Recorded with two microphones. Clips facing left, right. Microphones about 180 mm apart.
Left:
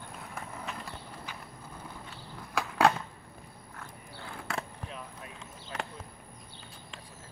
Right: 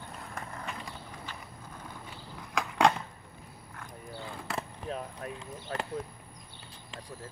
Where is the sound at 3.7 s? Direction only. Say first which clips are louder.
Right 5 dB; centre (ahead or behind).